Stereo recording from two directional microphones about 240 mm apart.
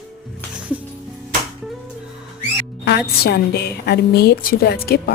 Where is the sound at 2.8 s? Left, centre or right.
Left.